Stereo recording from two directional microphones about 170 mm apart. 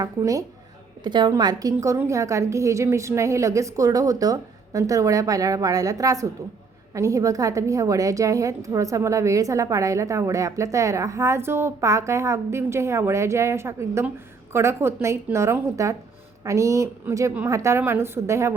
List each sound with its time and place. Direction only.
0.0 s a woman's voice: 20° right (ahead or behind)